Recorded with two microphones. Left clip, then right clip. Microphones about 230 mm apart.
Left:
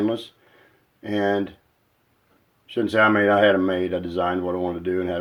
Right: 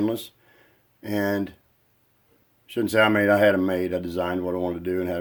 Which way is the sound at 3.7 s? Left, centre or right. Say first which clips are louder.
Left 2 dB; right.